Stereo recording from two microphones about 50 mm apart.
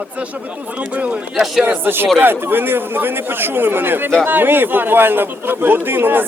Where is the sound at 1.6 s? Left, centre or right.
Right.